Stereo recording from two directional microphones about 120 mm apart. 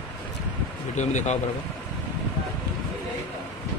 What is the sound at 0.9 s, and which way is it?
Speech, 85° left.